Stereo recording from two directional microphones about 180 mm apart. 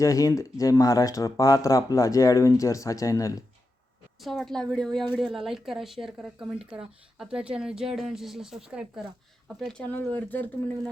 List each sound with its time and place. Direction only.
0.0 s speech: 20° left (ahead or behind)
4.2 s speech: centre (ahead or behind)